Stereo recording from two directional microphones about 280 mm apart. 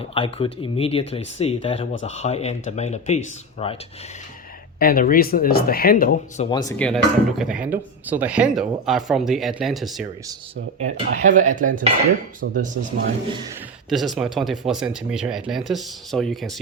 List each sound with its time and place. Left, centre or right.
0.1 s speech: centre
4.8 s speech: left; by 10.1 s centre
10.8 s speech: right
13.9 s speech: centre